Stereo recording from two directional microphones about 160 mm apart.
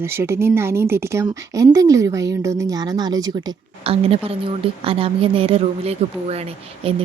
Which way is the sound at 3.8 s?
35° right (ahead or behind).